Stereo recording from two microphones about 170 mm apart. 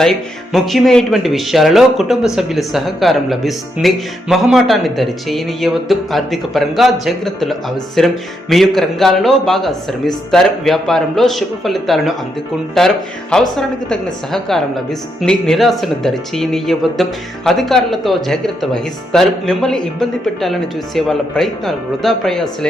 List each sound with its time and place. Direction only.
0.0 s a woman's voice: centre (ahead or behind)